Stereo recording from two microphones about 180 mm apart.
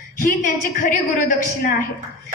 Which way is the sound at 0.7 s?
45° left (ahead or behind).